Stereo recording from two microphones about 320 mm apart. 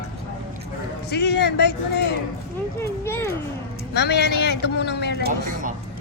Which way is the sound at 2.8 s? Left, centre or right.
Centre.